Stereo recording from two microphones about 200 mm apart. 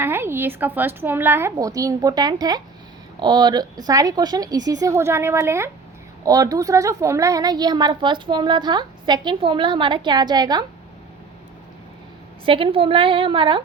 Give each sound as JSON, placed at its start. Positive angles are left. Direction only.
{"t": 0.0, "sound": "a woman's voice", "side_deg": -10}
{"t": 12.5, "sound": "a woman's voice", "side_deg": -25}